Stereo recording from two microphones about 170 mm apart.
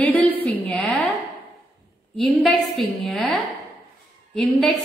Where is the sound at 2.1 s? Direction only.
Centre (ahead or behind).